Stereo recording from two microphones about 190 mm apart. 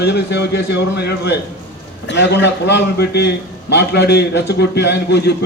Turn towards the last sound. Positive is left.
turn(degrees=60)  # may be behind; listen again after turning